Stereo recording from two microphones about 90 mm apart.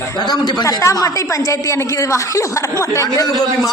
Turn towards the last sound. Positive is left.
turn(degrees=40)  # may be behind; listen again after turning